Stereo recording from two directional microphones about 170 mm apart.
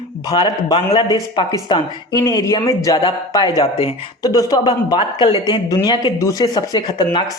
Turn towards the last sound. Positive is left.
turn(degrees=25)  # may be behind; listen again after turning